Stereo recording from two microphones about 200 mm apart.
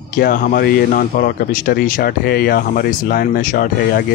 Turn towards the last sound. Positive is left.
turn(degrees=45)  # may be behind; listen again after turning